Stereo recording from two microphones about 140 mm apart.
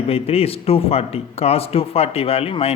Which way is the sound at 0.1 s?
45° left (ahead or behind).